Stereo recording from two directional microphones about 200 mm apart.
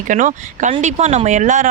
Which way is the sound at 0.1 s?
40° right (ahead or behind).